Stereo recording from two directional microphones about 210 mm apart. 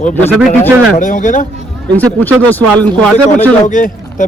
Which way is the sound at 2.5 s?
10° left (ahead or behind).